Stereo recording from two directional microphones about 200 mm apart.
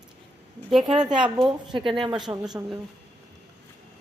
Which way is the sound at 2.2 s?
5° right (ahead or behind).